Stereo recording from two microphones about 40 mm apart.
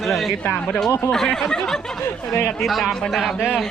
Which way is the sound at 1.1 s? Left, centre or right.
Centre.